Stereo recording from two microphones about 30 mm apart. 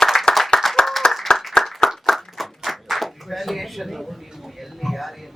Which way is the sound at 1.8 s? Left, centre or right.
Centre.